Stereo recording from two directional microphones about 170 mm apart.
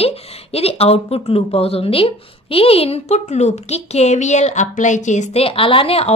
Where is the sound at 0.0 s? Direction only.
35° left (ahead or behind).